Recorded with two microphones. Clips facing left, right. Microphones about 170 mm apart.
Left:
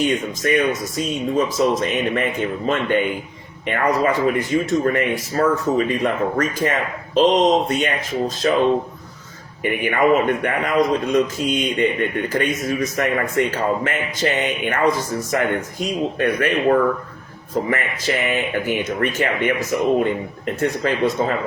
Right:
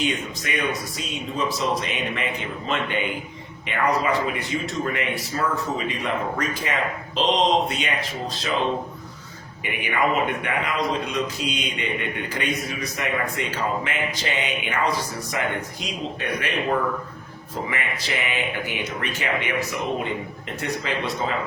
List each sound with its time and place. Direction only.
0.0 s a man's voice: 45° left (ahead or behind)
9.6 s a man's voice: 50° left (ahead or behind)